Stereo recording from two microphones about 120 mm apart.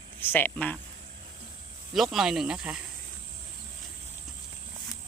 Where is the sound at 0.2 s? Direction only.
15° left (ahead or behind).